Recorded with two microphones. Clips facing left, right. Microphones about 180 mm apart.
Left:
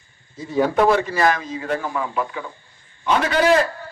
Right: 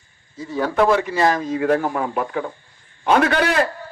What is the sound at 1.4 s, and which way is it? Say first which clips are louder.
A man's voice: right 6 dB; 60° right (ahead or behind).